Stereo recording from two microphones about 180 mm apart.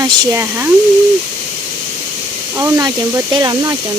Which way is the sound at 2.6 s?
20° right (ahead or behind).